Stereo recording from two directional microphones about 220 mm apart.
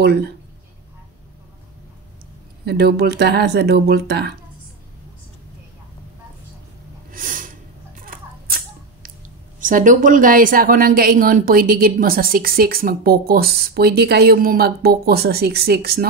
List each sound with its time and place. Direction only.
2.6 s speech: 45° right (ahead or behind)
7.1 s snort: 40° right (ahead or behind)
8.0 s a sound: 40° right (ahead or behind)
9.6 s a woman's voice: 35° right (ahead or behind)